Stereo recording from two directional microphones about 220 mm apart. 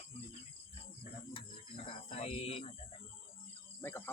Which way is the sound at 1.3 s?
25° left (ahead or behind).